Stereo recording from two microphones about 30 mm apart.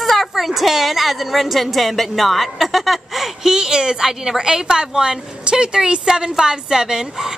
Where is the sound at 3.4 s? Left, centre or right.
Right.